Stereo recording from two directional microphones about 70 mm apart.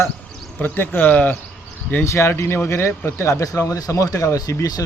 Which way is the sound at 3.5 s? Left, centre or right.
Left.